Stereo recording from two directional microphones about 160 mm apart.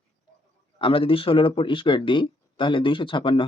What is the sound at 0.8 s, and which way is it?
Speech, 35° left (ahead or behind).